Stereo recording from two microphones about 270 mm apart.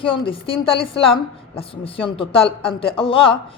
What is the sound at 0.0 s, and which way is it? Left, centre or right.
A woman's voice, centre.